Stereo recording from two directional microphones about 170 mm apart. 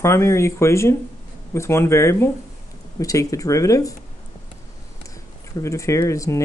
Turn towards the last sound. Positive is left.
turn(degrees=20)  # may be behind; listen again after turning